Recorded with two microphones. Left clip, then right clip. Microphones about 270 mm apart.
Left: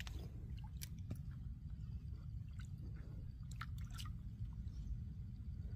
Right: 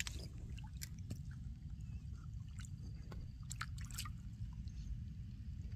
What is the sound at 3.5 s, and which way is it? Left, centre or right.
Drip, right.